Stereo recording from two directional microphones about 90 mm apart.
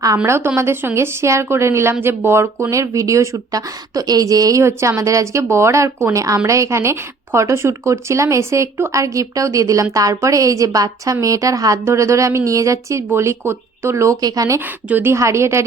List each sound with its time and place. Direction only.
0.3 s a woman's voice: 30° right (ahead or behind)
14.2 s a woman's voice: 45° right (ahead or behind)
14.8 s speech: 20° right (ahead or behind)
15.1 s a woman's voice: 30° right (ahead or behind)